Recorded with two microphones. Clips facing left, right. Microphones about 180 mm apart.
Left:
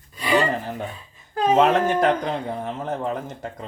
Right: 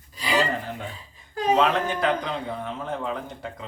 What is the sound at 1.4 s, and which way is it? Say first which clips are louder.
Speech: left 4 dB; 50° left (ahead or behind).